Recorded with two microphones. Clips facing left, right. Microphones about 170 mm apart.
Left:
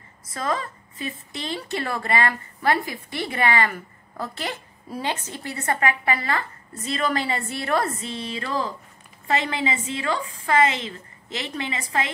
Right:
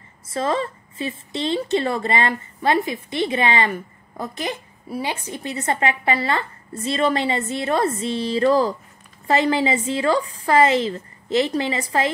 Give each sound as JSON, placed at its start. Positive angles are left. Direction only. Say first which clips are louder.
{"t": 0.3, "sound": "a woman's voice", "louder": "right 5 dB", "side_deg": -30}